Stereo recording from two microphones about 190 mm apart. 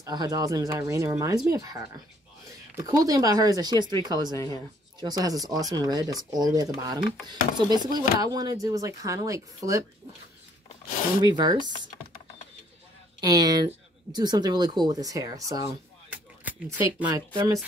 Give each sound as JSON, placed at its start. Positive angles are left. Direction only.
{"t": 0.0, "sound": "speech", "side_deg": -20}
{"t": 4.3, "sound": "speech", "side_deg": 15}
{"t": 5.0, "sound": "speech", "side_deg": -20}
{"t": 11.2, "sound": "speech", "side_deg": -20}
{"t": 13.2, "sound": "speech", "side_deg": -20}
{"t": 16.1, "sound": "a sound", "side_deg": -10}
{"t": 17.3, "sound": "speech", "side_deg": -15}